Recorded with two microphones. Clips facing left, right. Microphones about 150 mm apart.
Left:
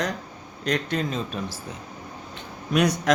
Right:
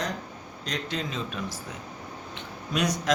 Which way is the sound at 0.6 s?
55° left (ahead or behind).